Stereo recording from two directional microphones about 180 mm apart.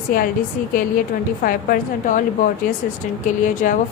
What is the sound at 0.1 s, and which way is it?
Speech, 50° left (ahead or behind).